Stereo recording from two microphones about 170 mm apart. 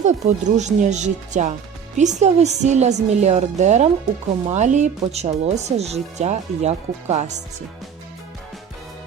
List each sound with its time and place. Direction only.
0.0 s speech: 45° right (ahead or behind)